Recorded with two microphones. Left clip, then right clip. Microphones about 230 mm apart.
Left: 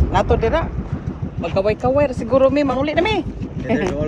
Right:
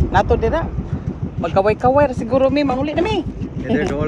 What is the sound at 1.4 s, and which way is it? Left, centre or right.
Speech, left.